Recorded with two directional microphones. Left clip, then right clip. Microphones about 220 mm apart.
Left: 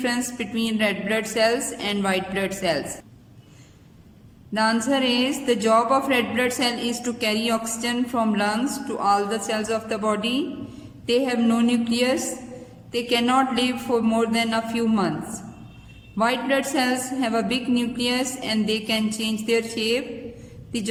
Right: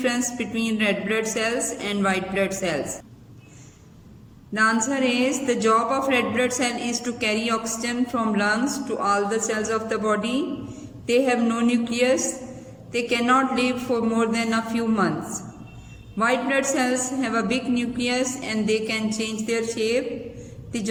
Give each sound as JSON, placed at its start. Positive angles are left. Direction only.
{"t": 0.0, "sound": "a woman's voice", "side_deg": 20}
{"t": 4.5, "sound": "a woman's voice", "side_deg": 20}
{"t": 16.1, "sound": "a woman's voice", "side_deg": 25}